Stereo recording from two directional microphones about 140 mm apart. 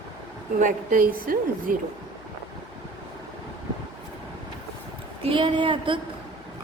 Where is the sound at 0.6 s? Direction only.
75° right (ahead or behind).